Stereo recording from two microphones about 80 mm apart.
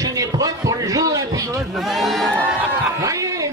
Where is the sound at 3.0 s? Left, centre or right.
Right.